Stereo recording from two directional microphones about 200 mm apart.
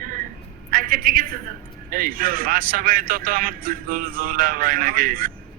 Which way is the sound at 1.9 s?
45° right (ahead or behind).